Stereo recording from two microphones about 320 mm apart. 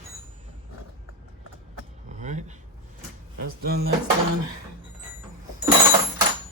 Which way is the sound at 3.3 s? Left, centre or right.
Right.